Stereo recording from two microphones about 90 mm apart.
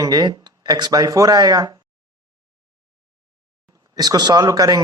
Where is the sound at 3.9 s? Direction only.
50° right (ahead or behind).